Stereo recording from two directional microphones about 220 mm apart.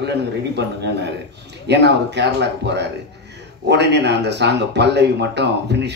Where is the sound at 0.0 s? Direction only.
50° right (ahead or behind).